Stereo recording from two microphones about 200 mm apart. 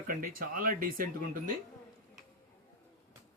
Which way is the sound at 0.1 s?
45° right (ahead or behind).